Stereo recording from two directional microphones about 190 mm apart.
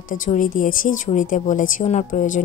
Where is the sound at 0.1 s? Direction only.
45° left (ahead or behind).